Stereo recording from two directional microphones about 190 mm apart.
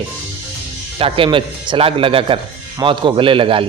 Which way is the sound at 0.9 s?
30° right (ahead or behind).